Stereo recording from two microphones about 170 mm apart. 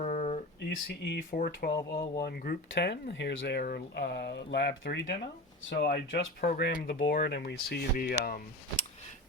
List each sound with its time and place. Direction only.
0.0 s a sound: 45° left (ahead or behind)
1.0 s speech: 65° left (ahead or behind); by 5.0 s 90° left
5.6 s speech: 65° left (ahead or behind)